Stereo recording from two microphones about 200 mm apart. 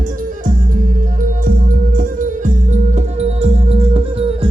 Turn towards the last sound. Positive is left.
turn(degrees=-30)  # may be behind; listen again after turning